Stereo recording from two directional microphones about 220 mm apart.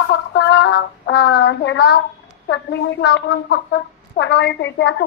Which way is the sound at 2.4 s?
55° left (ahead or behind).